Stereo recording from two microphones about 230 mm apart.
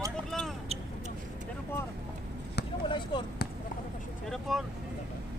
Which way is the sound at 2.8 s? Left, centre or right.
Left.